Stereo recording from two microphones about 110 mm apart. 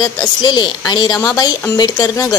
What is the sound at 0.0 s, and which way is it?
A woman's voice, 40° left (ahead or behind).